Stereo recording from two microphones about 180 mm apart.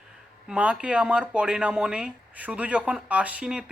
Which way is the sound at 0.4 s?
5° right (ahead or behind).